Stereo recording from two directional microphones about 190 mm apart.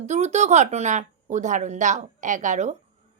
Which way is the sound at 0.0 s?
35° right (ahead or behind).